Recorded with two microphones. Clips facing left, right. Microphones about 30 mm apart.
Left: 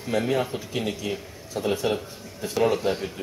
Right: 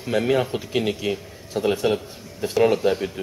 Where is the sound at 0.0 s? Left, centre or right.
Centre.